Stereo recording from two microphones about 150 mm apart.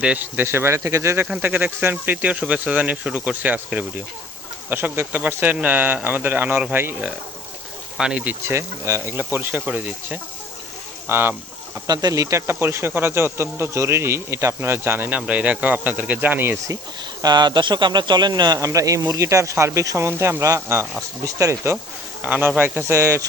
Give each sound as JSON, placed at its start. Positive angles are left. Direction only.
{"t": 0.0, "sound": "speech", "side_deg": -10}
{"t": 17.2, "sound": "speech", "side_deg": -30}